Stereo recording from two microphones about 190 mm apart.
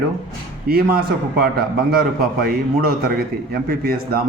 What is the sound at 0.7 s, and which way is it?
A man's voice, 50° right (ahead or behind).